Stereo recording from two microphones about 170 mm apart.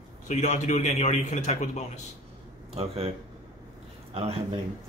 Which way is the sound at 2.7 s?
35° right (ahead or behind).